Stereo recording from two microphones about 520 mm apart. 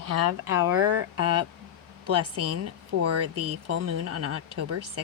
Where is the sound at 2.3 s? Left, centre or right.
Right.